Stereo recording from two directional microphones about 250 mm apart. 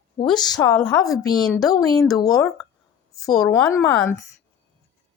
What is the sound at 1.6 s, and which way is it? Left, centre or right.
Speech, centre.